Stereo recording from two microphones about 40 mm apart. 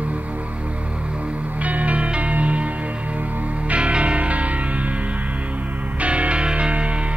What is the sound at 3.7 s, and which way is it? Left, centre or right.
Music, right.